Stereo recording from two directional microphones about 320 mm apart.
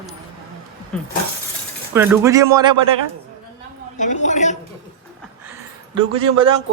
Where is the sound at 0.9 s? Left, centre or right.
Centre.